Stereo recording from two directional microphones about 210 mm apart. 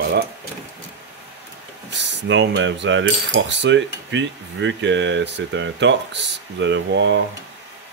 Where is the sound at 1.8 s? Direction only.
55° right (ahead or behind).